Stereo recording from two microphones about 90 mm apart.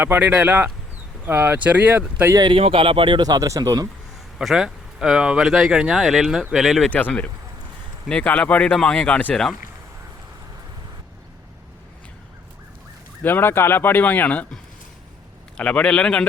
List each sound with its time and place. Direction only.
0.0 s speech: 20° right (ahead or behind)
2.5 s speech: 80° right
3.2 s speech: 45° right (ahead or behind)
4.4 s speech: 5° right (ahead or behind)
6.9 s speech: 15° left (ahead or behind)
13.2 s speech: 25° left (ahead or behind)
15.5 s speech: 10° left (ahead or behind)